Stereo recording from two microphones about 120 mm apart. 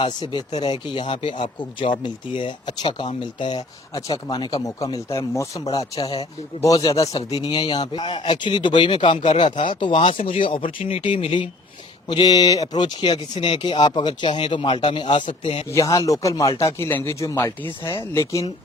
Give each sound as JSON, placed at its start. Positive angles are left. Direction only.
{"t": 0.0, "sound": "a man's voice", "side_deg": 40}
{"t": 15.7, "sound": "speech", "side_deg": 25}